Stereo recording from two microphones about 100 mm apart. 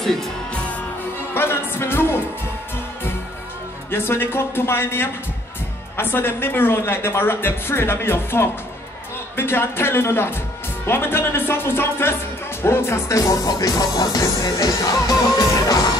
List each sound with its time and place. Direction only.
0.0 s music: 5° left (ahead or behind)
1.3 s speech: 25° left (ahead or behind)
3.9 s speech: 25° left (ahead or behind)
12.6 s music: 25° left (ahead or behind)